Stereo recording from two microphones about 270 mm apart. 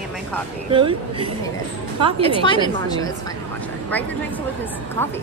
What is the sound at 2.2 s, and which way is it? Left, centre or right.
Speech, centre.